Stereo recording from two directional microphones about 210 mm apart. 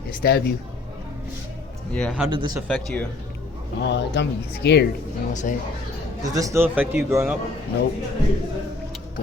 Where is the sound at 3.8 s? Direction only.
55° left (ahead or behind).